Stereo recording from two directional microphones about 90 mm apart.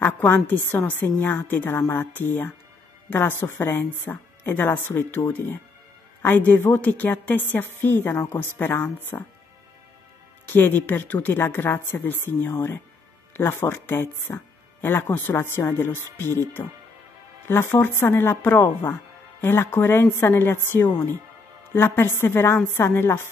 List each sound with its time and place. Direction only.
0.0 s speech: 20° left (ahead or behind)
6.2 s speech: 20° left (ahead or behind)
10.5 s speech: 20° left (ahead or behind)